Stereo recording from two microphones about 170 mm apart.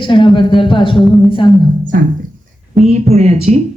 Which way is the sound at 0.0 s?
30° left (ahead or behind).